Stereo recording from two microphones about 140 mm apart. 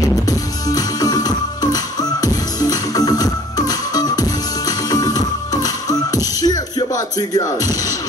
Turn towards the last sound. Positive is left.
turn(degrees=25)  # may be behind; listen again after turning